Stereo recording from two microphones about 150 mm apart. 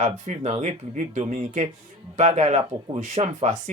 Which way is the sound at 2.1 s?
50° right (ahead or behind).